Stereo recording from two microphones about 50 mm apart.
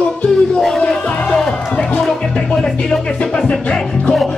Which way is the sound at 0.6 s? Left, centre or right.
Centre.